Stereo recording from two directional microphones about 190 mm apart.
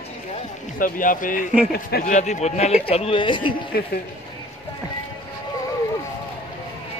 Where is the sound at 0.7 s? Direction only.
45° left (ahead or behind).